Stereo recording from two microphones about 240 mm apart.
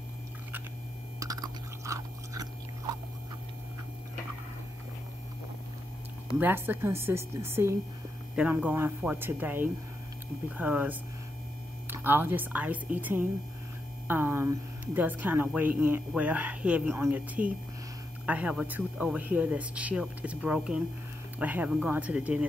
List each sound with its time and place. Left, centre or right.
1.9 s chewing: centre
6.3 s speech: centre
18.2 s speech: centre